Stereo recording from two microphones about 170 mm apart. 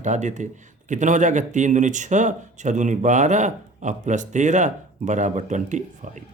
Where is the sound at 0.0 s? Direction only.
45° right (ahead or behind).